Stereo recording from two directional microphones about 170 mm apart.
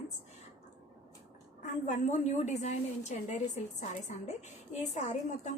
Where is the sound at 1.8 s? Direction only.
45° left (ahead or behind).